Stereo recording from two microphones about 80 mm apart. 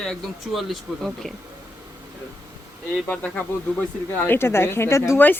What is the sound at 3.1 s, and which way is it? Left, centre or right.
Speech, centre.